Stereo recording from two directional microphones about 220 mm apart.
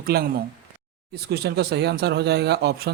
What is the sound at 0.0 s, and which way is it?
Speech, 45° right (ahead or behind).